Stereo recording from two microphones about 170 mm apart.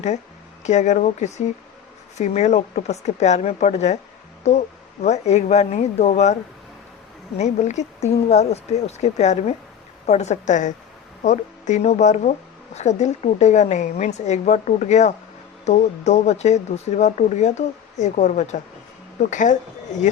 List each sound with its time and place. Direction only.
0.6 s speech: 45° left (ahead or behind)
7.3 s speech: 40° left (ahead or behind)